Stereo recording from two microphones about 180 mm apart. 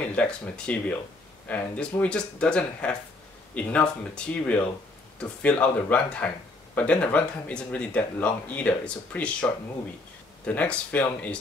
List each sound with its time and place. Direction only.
0.0 s speech: 5° left (ahead or behind)